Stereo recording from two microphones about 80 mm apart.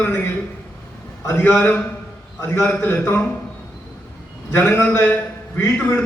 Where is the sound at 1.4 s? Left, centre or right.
Left.